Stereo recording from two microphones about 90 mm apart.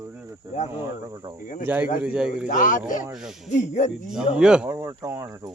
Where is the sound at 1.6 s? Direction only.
20° right (ahead or behind).